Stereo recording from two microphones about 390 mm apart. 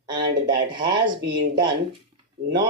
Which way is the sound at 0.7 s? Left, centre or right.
Right.